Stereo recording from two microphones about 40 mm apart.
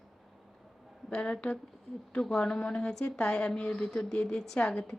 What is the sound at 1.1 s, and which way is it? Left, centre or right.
A woman's voice, left.